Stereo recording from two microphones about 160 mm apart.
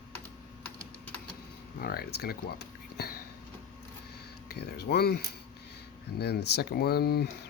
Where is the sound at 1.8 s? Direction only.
70° left (ahead or behind).